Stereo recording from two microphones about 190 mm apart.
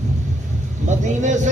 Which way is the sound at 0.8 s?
40° right (ahead or behind).